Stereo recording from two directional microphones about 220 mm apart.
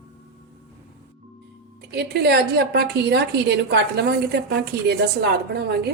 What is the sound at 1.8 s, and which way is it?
A woman's voice, 45° right (ahead or behind).